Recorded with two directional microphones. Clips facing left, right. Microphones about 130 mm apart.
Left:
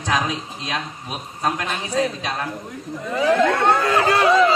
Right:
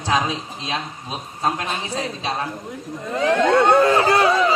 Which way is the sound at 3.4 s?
25° right (ahead or behind).